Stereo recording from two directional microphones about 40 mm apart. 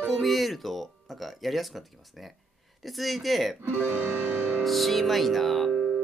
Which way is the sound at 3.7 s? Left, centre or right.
Right.